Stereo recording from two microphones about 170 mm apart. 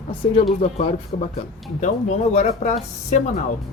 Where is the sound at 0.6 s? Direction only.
40° left (ahead or behind).